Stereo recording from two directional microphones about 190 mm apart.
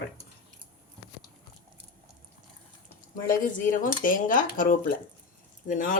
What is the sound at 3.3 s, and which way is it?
Speech, 45° left (ahead or behind).